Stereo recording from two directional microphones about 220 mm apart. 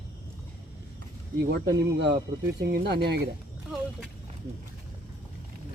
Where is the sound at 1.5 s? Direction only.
50° right (ahead or behind).